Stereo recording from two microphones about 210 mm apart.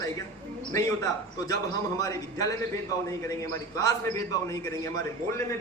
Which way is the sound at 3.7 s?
15° left (ahead or behind).